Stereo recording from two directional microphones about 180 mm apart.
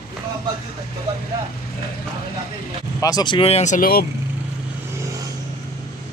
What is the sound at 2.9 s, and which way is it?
Speech, 20° left (ahead or behind).